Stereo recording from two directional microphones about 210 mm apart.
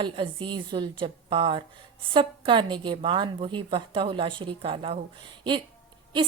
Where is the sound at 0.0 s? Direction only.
25° right (ahead or behind).